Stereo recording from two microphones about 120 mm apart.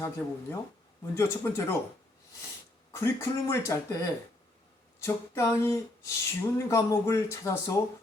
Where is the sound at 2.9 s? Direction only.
20° left (ahead or behind).